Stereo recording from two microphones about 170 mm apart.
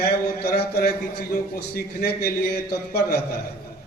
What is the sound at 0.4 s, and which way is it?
A man's voice, 70° left (ahead or behind).